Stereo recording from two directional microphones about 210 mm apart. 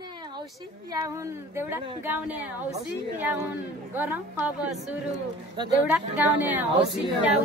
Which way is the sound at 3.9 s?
5° right (ahead or behind).